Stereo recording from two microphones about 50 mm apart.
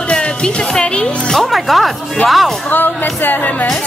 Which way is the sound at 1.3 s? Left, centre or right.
Centre.